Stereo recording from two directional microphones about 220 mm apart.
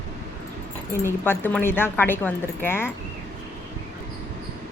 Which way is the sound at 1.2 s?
10° left (ahead or behind).